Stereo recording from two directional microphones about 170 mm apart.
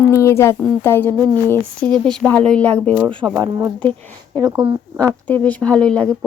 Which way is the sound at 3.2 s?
10° right (ahead or behind).